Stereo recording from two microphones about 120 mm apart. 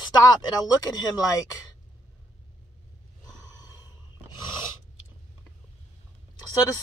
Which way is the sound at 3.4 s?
30° left (ahead or behind).